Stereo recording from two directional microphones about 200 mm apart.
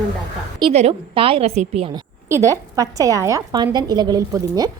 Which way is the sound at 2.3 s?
15° right (ahead or behind).